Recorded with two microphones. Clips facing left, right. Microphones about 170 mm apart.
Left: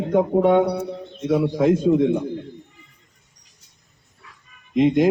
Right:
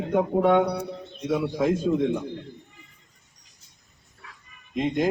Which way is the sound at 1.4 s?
10° left (ahead or behind).